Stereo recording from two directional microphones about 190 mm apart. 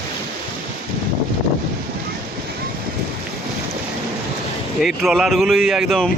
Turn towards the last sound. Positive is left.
turn(degrees=0)  # may be behind; listen again after turning